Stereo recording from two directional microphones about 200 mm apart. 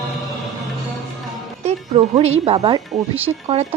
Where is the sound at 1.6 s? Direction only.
30° right (ahead or behind).